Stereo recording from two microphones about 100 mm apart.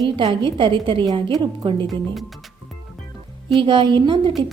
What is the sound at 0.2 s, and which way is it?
A woman's voice, 55° right (ahead or behind).